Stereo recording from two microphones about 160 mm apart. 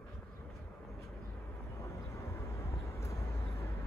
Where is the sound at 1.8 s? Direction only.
20° left (ahead or behind).